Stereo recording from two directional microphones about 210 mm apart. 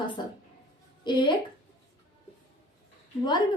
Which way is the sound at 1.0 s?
20° left (ahead or behind).